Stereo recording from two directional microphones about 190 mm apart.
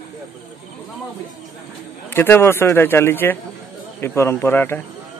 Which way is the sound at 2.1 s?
10° left (ahead or behind).